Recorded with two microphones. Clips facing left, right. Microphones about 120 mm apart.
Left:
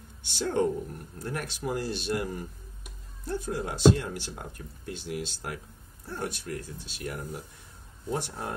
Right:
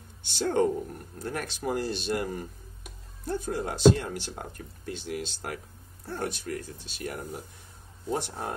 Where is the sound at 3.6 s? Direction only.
40° right (ahead or behind).